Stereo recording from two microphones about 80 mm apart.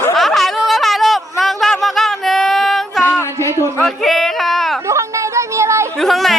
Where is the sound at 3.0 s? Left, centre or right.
Left.